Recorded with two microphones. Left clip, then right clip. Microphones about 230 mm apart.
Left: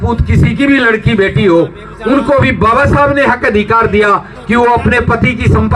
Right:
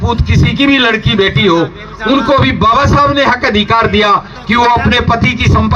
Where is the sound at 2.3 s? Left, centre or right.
Right.